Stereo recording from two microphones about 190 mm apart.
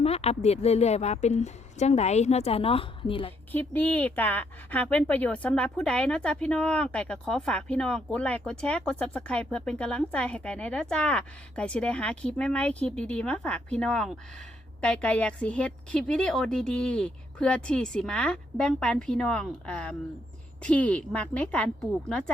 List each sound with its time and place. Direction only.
0.0 s a woman's voice: 35° left (ahead or behind)
3.5 s a woman's voice: 10° left (ahead or behind)